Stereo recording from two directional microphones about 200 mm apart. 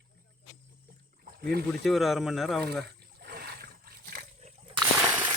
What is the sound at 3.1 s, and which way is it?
Wild animals, 50° right (ahead or behind).